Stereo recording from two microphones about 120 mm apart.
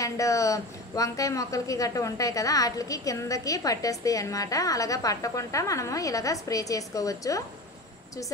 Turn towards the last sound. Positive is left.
turn(degrees=30)  # may be behind; listen again after turning